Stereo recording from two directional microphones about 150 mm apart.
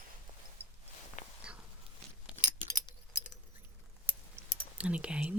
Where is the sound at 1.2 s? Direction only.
55° left (ahead or behind).